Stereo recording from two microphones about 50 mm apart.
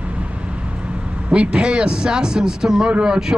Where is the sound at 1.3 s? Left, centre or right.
Right.